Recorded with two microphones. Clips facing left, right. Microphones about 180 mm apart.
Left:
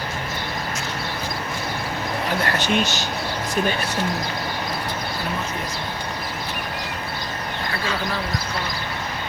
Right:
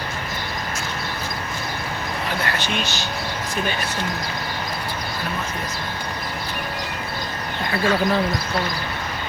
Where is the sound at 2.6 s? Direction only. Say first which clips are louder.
Left 4 dB; 45° left (ahead or behind).